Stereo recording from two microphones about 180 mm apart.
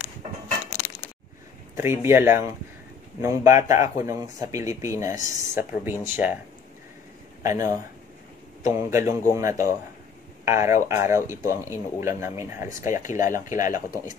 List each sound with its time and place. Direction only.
1.8 s speech: 15° right (ahead or behind)
7.4 s speech: 15° right (ahead or behind)
12.9 s speech: 45° left (ahead or behind)